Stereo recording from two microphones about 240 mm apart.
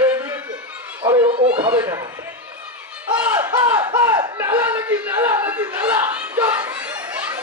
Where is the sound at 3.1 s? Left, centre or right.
Centre.